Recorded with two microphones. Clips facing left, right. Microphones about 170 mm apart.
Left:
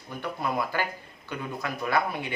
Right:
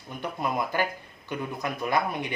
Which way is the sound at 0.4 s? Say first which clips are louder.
Right 2 dB; 20° right (ahead or behind).